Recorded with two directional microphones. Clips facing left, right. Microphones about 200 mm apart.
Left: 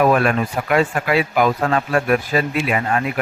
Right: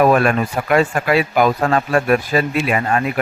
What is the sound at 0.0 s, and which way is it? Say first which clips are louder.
Speech: right 2 dB; 45° right (ahead or behind).